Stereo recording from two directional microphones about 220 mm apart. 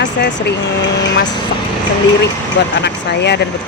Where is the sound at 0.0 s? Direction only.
55° left (ahead or behind).